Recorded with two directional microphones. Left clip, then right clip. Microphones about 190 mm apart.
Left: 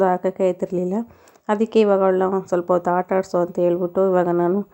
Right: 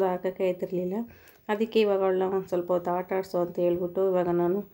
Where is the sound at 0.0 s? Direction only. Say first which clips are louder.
Left 8 dB; 25° left (ahead or behind).